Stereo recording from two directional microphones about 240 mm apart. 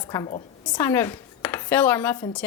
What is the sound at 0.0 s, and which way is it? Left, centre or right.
A woman's voice, centre.